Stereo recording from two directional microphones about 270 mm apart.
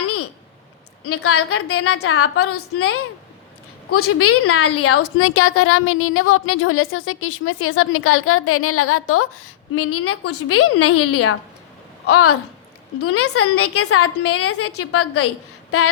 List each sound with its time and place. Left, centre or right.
1.0 s a woman's voice: left